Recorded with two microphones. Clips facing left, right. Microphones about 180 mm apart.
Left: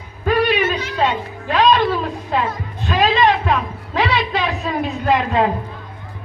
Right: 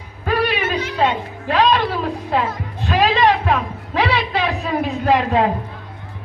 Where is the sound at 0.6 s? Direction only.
55° right (ahead or behind).